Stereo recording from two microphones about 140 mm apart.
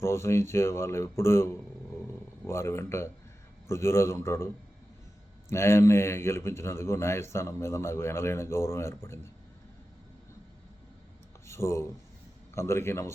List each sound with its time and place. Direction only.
0.0 s a man's voice: 20° left (ahead or behind)
2.5 s a man's voice: 20° left (ahead or behind)
5.5 s a man's voice: 20° left (ahead or behind)
11.4 s a man's voice: 20° left (ahead or behind)